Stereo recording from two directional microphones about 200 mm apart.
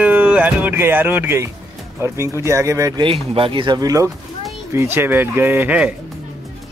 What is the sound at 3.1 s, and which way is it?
Speech, 25° right (ahead or behind).